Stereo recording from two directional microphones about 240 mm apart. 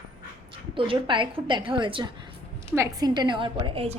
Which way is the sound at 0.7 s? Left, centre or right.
Right.